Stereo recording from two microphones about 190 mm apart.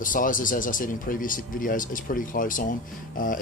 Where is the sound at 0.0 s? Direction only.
45° left (ahead or behind).